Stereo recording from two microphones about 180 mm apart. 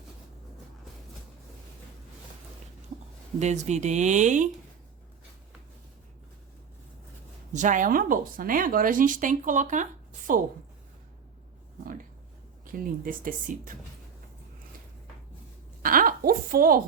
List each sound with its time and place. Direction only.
3.3 s speech: 40° right (ahead or behind)
7.5 s speech: 45° right (ahead or behind)
12.6 s speech: 50° right (ahead or behind)
15.8 s a sound: 50° right (ahead or behind)